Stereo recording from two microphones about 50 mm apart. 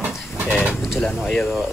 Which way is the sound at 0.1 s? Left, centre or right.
Centre.